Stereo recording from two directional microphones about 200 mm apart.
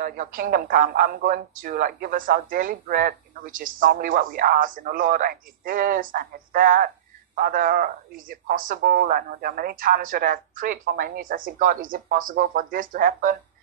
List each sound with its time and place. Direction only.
0.0 s speech: 45° right (ahead or behind)